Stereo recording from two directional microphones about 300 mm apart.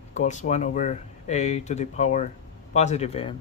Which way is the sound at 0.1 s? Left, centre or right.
Left.